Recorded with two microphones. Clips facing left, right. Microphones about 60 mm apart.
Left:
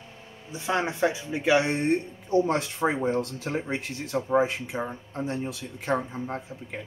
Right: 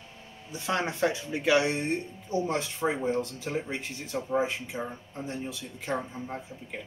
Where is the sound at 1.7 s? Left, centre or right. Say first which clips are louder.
Left 5 dB; left.